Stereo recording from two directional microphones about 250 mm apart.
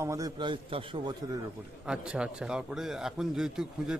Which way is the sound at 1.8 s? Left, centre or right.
Centre.